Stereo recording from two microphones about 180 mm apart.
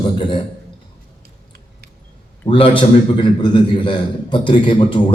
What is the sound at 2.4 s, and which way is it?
A man's voice, 30° left (ahead or behind).